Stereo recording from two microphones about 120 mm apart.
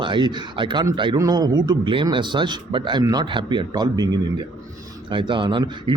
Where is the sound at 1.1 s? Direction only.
30° right (ahead or behind).